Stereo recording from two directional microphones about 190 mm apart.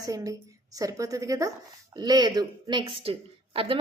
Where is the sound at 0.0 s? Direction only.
20° right (ahead or behind).